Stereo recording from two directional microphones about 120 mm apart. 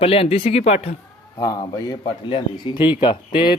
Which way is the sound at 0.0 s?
55° left (ahead or behind).